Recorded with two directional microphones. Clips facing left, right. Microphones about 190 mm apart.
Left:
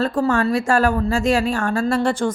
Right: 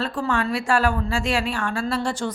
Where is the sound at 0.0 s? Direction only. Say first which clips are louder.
Left 6 dB; 40° left (ahead or behind).